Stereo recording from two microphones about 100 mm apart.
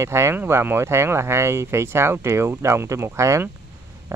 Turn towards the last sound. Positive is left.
turn(degrees=-30)  # may be behind; listen again after turning